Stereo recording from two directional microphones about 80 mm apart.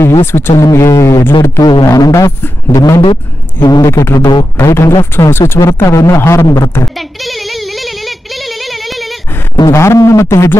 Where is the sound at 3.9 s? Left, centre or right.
Left.